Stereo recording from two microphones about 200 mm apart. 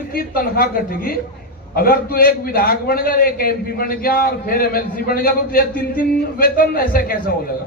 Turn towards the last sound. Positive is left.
turn(degrees=45)  # may be behind; listen again after turning